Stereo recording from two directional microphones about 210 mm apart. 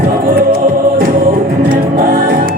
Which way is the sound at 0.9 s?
45° right (ahead or behind).